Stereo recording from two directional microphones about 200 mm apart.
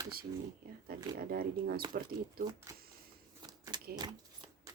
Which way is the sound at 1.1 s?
50° right (ahead or behind).